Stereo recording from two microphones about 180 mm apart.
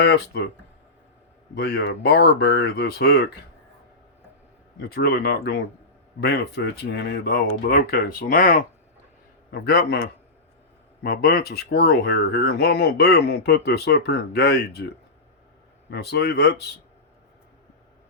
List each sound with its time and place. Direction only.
0.0 s speech: 70° left (ahead or behind)
1.5 s speech: 65° left (ahead or behind)
4.8 s speech: 60° left (ahead or behind)
7.7 s speech: 55° left (ahead or behind)
9.5 s speech: 60° left (ahead or behind)
11.0 s speech: 60° left (ahead or behind)
15.9 s speech: 65° left (ahead or behind)